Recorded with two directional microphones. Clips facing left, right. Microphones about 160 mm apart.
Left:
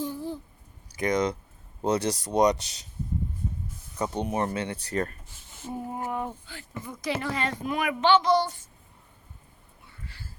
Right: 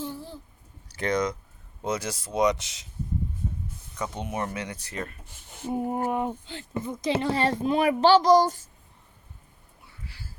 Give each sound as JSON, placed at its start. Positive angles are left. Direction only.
{"t": 0.0, "sound": "a sound", "side_deg": 15}
{"t": 0.9, "sound": "speech", "side_deg": 15}
{"t": 1.8, "sound": "speech", "side_deg": 35}
{"t": 3.9, "sound": "speech", "side_deg": 35}
{"t": 5.6, "sound": "speech", "side_deg": -25}